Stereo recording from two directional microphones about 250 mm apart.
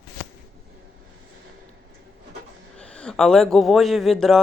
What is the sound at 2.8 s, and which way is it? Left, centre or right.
A man's voice, centre.